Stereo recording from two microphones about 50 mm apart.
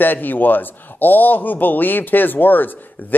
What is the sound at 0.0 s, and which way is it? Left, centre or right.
Speech, left.